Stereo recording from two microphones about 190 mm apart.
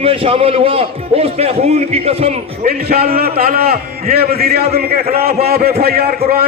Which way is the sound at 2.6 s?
55° right (ahead or behind).